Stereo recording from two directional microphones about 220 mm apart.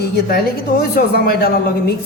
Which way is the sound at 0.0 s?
45° left (ahead or behind).